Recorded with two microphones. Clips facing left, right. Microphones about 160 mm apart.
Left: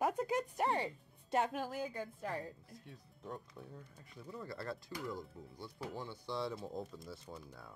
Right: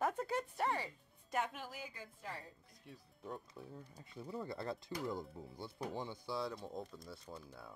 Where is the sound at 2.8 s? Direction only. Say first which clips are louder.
Right 2 dB; centre (ahead or behind).